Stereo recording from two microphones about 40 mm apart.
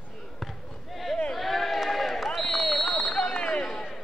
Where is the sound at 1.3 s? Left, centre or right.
Centre.